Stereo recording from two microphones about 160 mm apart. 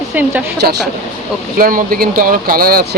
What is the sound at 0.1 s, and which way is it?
Speech, 10° right (ahead or behind).